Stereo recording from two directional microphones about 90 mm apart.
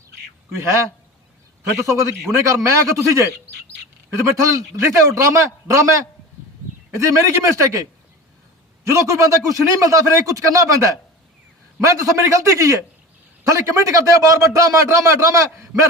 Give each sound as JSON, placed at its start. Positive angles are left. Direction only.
{"t": 1.9, "sound": "speech", "side_deg": -35}
{"t": 4.4, "sound": "speech", "side_deg": -35}
{"t": 8.8, "sound": "speech", "side_deg": -35}
{"t": 11.9, "sound": "speech", "side_deg": -35}